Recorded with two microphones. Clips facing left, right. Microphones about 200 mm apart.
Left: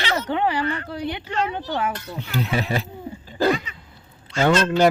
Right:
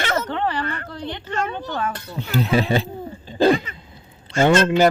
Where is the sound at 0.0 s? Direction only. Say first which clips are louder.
Right 2 dB; 50° right (ahead or behind).